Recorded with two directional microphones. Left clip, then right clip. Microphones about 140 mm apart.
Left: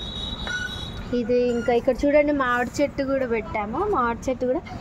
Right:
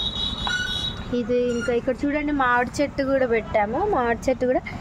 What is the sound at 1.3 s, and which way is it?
Speech, 5° right (ahead or behind).